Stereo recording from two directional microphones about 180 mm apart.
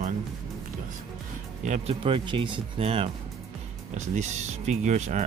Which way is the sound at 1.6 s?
40° right (ahead or behind).